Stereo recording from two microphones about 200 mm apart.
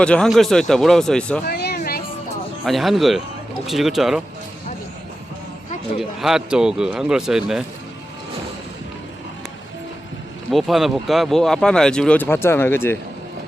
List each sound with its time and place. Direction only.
0.0 s speech: 5° left (ahead or behind)
1.5 s a sound: 50° left (ahead or behind)
2.6 s speech: centre (ahead or behind)
6.0 s speech: centre (ahead or behind)
10.5 s speech: centre (ahead or behind)